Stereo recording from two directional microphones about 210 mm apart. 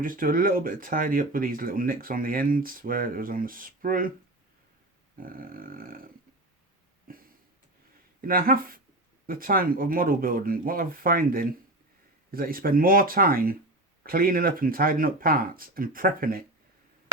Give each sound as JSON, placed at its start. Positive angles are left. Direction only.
{"t": 0.0, "sound": "speech", "side_deg": -40}
{"t": 5.1, "sound": "speech", "side_deg": -45}
{"t": 7.1, "sound": "a sound", "side_deg": -45}
{"t": 8.2, "sound": "speech", "side_deg": -45}